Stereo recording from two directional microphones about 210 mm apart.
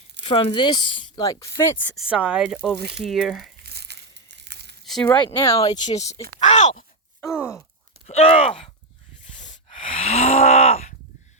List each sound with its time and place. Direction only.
0.3 s speech: 25° left (ahead or behind)
2.0 s speech: 5° right (ahead or behind)
2.7 s speech: 50° right (ahead or behind)
3.0 s speech: centre (ahead or behind)
3.6 s crumpling: 50° right (ahead or behind)
5.0 s speech: 20° left (ahead or behind)
7.2 s groan: 10° left (ahead or behind)
8.0 s speech: 30° left (ahead or behind)
9.6 s a sound: 30° left (ahead or behind)